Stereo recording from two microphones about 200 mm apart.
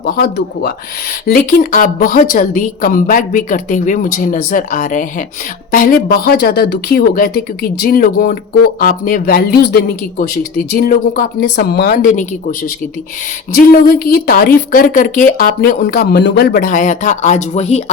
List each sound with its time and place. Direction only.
0.0 s speech: 50° left (ahead or behind)
12.1 s speech: 45° left (ahead or behind)